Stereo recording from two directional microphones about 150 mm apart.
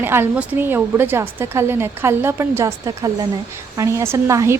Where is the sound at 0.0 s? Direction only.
15° right (ahead or behind).